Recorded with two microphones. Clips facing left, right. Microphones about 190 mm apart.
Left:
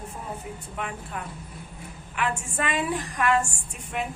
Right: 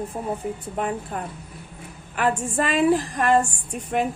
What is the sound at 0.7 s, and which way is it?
A woman's voice, 40° right (ahead or behind).